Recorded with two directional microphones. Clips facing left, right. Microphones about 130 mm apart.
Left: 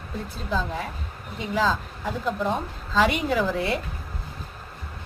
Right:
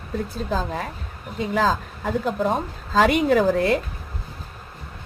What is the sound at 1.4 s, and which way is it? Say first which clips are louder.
A woman's voice: right 3 dB; 50° right (ahead or behind).